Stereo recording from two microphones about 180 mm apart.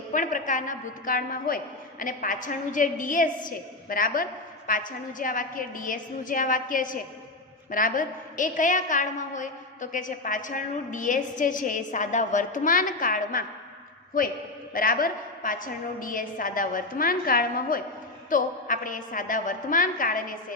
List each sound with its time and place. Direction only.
0.1 s a woman's voice: 45° left (ahead or behind)
14.7 s a woman's voice: 55° left (ahead or behind)